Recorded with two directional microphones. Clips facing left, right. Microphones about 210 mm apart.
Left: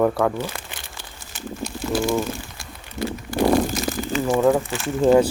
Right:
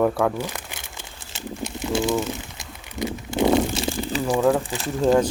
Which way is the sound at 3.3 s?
20° right (ahead or behind).